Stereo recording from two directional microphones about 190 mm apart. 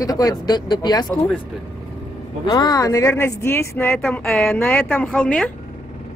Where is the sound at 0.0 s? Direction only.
20° left (ahead or behind).